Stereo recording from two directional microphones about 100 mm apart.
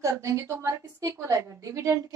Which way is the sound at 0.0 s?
30° right (ahead or behind).